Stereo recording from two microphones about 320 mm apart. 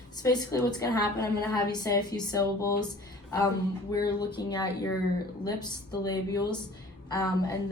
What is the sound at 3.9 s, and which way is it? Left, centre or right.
A woman's voice, centre.